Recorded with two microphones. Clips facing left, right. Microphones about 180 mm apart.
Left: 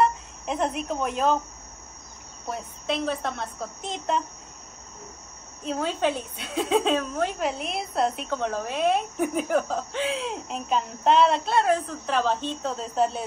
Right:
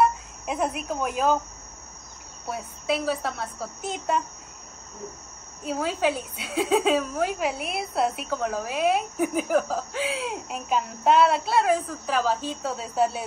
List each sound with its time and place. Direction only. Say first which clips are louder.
0.0 s speech: right 1 dB; 5° right (ahead or behind)
2.4 s a woman's voice: right 1 dB; 5° right (ahead or behind)
5.6 s a woman's voice: even; 5° right (ahead or behind)